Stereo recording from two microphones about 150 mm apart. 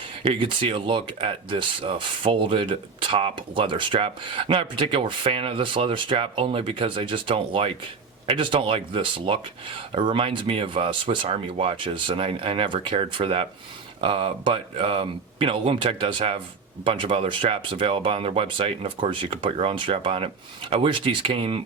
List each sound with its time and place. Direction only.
0.2 s speech: 35° right (ahead or behind)